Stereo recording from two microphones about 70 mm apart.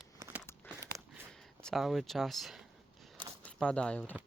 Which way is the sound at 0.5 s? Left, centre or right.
Left.